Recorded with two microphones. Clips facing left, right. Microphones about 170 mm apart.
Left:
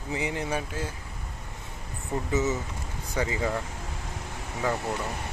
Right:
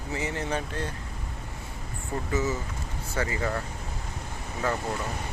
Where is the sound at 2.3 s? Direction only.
20° left (ahead or behind).